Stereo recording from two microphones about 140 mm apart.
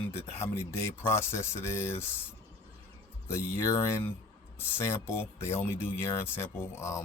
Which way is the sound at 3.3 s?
20° left (ahead or behind).